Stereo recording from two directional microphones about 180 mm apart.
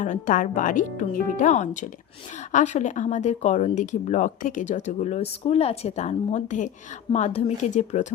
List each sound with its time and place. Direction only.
0.0 s speech: 45° left (ahead or behind)